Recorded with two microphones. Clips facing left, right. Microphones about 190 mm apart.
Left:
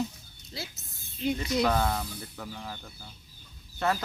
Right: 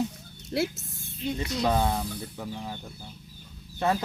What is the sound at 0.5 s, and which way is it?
Speech, 65° right (ahead or behind).